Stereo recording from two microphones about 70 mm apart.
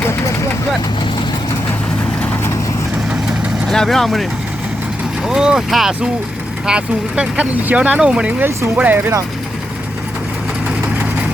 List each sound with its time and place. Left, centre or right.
3.7 s speech: centre
5.3 s speech: centre
8.4 s speech: right